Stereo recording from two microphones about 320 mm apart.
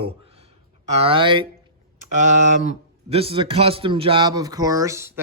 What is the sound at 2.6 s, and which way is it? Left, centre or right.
A man's voice, centre.